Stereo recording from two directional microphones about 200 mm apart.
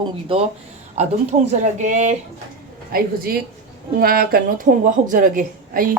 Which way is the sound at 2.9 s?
50° right (ahead or behind).